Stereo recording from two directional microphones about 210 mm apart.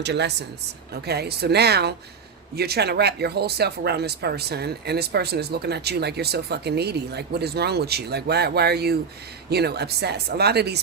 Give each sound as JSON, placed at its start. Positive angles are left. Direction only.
{"t": 0.0, "sound": "a woman's voice", "side_deg": -55}